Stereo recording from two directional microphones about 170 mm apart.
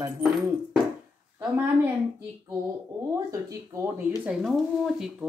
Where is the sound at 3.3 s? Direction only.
20° right (ahead or behind).